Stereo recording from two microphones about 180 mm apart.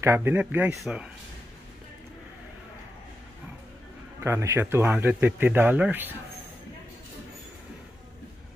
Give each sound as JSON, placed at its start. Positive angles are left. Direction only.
{"t": 0.0, "sound": "a man's voice", "side_deg": -15}
{"t": 4.2, "sound": "speech", "side_deg": -15}